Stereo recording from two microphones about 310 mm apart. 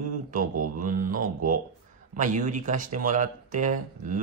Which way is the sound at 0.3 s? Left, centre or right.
Right.